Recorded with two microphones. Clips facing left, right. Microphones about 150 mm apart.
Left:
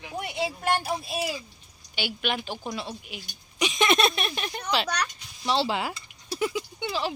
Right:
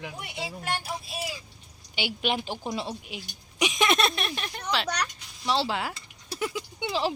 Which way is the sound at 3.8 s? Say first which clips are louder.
Left 3 dB; centre (ahead or behind).